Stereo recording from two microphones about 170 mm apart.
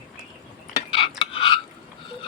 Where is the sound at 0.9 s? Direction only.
30° left (ahead or behind).